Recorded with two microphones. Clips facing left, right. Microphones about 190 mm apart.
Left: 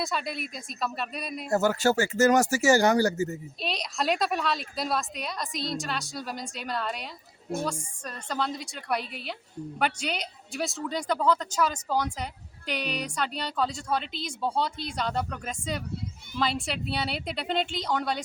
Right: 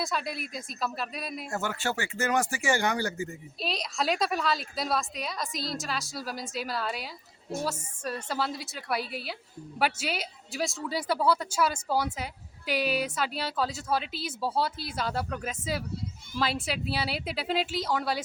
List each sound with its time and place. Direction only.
0.0 s speech: centre (ahead or behind)
1.5 s speech: 40° left (ahead or behind)
3.6 s speech: centre (ahead or behind)